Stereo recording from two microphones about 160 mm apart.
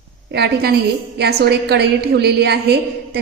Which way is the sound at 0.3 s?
90° right.